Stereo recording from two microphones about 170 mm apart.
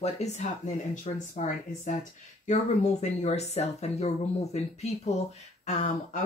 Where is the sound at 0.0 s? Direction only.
40° left (ahead or behind).